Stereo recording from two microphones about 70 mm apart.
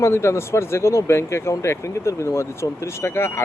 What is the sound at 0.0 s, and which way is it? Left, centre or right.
Speech, left.